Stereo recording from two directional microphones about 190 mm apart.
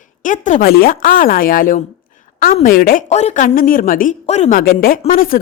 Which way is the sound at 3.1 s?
35° left (ahead or behind).